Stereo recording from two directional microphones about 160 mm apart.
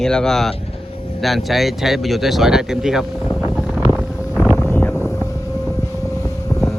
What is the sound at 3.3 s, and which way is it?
Wind noise, centre (ahead or behind).